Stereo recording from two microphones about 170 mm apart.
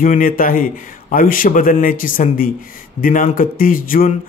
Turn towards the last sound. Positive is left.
turn(degrees=55)  # may be behind; listen again after turning